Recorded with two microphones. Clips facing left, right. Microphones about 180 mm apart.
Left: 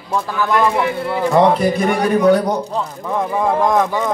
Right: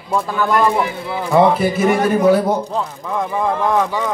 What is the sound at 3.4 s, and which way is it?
Speech, 10° left (ahead or behind).